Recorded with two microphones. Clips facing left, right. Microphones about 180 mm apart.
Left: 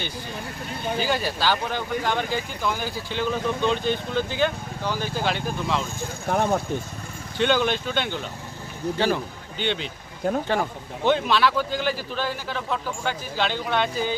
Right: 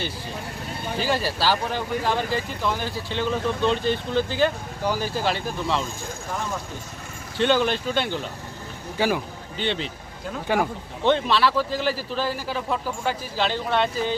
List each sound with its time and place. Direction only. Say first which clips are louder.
0.9 s speech: right 2 dB; centre (ahead or behind)
6.2 s speech: left 9 dB; 60° left (ahead or behind)
7.3 s speech: right 1 dB; centre (ahead or behind)
9.6 s speech: even; centre (ahead or behind)
10.5 s speech: right 6 dB; 10° right (ahead or behind)
11.0 s speech: even; centre (ahead or behind)